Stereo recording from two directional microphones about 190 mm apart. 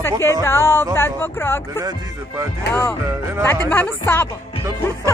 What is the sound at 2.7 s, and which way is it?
Speech, 15° left (ahead or behind).